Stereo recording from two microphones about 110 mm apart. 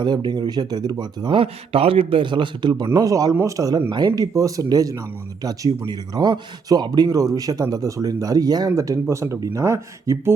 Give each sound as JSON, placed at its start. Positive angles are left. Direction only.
{"t": 0.0, "sound": "a man's voice", "side_deg": -40}
{"t": 1.4, "sound": "a man's voice", "side_deg": -60}